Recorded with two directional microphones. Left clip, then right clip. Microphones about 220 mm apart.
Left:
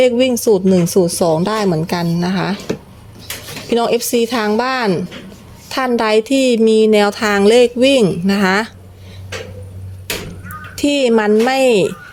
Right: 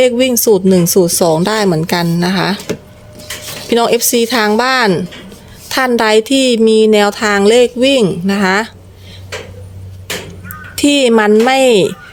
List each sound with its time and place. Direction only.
0.0 s speech: 5° right (ahead or behind)
3.7 s a woman's voice: 10° right (ahead or behind)
10.8 s speech: 10° right (ahead or behind)